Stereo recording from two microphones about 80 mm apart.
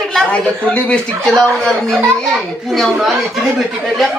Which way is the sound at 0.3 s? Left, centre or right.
Centre.